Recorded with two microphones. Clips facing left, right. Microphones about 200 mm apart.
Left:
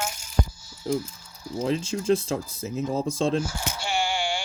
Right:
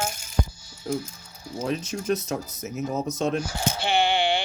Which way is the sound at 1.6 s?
25° left (ahead or behind).